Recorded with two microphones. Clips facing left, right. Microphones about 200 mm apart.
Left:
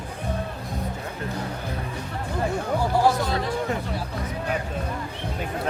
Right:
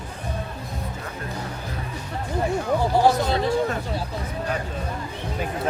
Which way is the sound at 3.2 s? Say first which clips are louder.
Right 3 dB; 25° right (ahead or behind).